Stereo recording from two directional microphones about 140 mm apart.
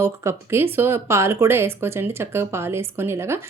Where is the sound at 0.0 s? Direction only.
20° right (ahead or behind).